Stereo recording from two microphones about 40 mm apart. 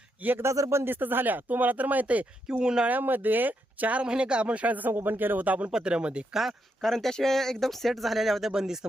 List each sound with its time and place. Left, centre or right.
0.2 s speech: right
0.9 s speech: right
2.5 s speech: centre
2.8 s speech: right
4.0 s speech: right
4.9 s speech: right
5.7 s speech: right
6.3 s speech: centre
6.8 s speech: centre
8.5 s speech: centre